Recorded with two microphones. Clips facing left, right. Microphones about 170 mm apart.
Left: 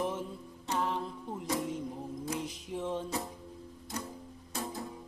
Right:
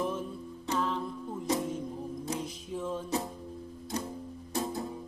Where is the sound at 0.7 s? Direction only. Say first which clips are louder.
Right 2 dB; 20° left (ahead or behind).